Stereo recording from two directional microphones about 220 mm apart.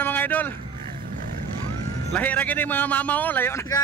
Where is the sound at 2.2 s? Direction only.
5° left (ahead or behind).